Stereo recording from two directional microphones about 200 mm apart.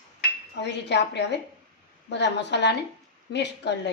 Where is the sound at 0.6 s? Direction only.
60° left (ahead or behind).